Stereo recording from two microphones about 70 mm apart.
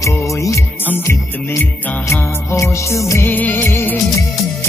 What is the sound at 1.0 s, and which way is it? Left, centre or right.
Music, left.